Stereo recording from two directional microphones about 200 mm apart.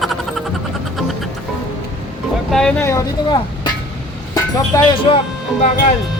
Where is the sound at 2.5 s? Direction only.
5° left (ahead or behind).